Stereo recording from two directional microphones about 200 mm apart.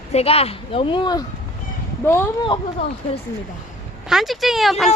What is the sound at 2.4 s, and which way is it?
Speech, 25° left (ahead or behind).